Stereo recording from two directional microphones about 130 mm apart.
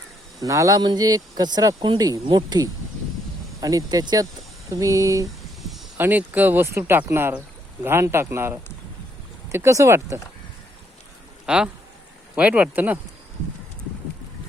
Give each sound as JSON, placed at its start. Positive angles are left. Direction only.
{"t": 0.4, "sound": "speech", "side_deg": -25}
{"t": 6.0, "sound": "speech", "side_deg": -15}
{"t": 11.4, "sound": "speech", "side_deg": -5}